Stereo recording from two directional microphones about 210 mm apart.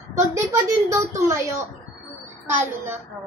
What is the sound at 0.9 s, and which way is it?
Speech, 15° right (ahead or behind).